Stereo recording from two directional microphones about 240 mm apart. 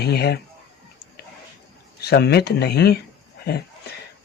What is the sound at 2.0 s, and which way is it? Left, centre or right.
Speech, left.